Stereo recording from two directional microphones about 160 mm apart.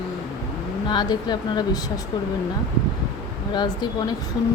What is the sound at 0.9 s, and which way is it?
Speech, 25° left (ahead or behind).